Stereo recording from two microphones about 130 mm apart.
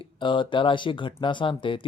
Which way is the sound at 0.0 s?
40° left (ahead or behind).